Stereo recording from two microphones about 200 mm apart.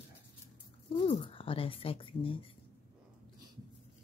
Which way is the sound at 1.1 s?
25° left (ahead or behind).